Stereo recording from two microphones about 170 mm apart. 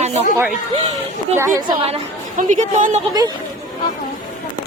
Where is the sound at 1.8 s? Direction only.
35° right (ahead or behind).